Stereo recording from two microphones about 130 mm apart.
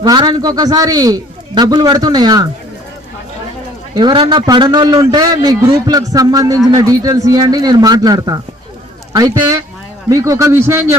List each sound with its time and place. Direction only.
0.0 s a man's voice: 35° right (ahead or behind)
3.9 s a man's voice: 35° right (ahead or behind)